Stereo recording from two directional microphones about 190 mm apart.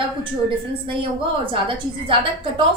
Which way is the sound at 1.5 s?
25° right (ahead or behind).